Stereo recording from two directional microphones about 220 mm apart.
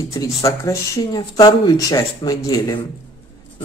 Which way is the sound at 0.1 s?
15° left (ahead or behind).